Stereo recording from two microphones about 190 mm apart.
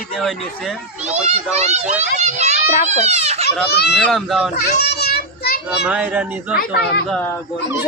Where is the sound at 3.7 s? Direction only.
60° left (ahead or behind).